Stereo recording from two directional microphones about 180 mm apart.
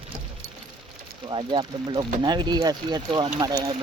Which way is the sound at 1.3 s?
25° right (ahead or behind).